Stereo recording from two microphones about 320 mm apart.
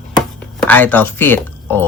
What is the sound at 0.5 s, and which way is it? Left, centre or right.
Speech, centre.